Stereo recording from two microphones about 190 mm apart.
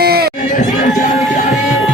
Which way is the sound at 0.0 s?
55° right (ahead or behind).